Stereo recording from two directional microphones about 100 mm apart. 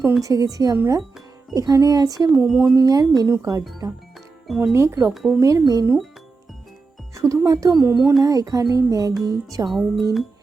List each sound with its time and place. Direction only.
0.2 s speech: 35° right (ahead or behind)
2.4 s speech: 20° right (ahead or behind)
2.7 s speech: 35° right (ahead or behind)
4.4 s speech: 5° right (ahead or behind)
4.7 s speech: 30° right (ahead or behind)
5.1 s speech: centre (ahead or behind)
5.4 s speech: 30° right (ahead or behind)
7.1 s speech: 30° right (ahead or behind)
7.8 s speech: 20° right (ahead or behind)
8.2 s speech: 40° right (ahead or behind)
9.6 s speech: centre (ahead or behind)